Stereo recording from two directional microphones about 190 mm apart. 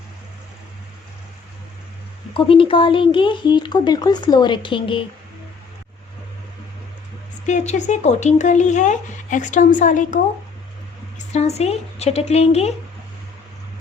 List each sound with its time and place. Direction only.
2.3 s speech: 30° left (ahead or behind)
7.4 s speech: 40° left (ahead or behind)
11.3 s speech: 35° left (ahead or behind)